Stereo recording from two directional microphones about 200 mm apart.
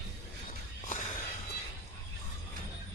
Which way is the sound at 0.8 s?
40° left (ahead or behind).